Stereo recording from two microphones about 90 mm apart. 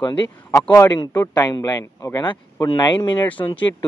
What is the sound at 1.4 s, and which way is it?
Speech, 45° left (ahead or behind).